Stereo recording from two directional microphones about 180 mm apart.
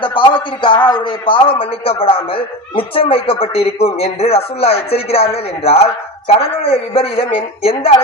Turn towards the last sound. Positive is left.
turn(degrees=35)  # may be behind; listen again after turning